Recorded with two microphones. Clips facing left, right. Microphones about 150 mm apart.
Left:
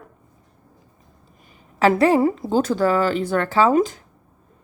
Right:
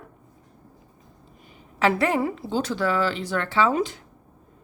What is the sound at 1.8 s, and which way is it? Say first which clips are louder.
A woman's voice: left 6 dB; 35° left (ahead or behind).